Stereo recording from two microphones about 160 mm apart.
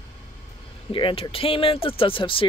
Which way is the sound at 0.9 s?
30° left (ahead or behind).